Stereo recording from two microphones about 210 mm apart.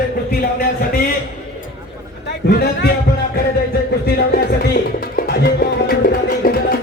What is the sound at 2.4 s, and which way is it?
Speech, 55° left (ahead or behind).